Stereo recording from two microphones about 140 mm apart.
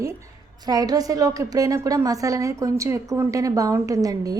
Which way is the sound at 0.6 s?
25° right (ahead or behind).